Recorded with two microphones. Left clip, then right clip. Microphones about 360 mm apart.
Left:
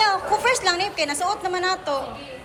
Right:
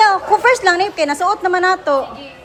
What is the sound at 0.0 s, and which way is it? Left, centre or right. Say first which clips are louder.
A woman's voice: right 8 dB; centre.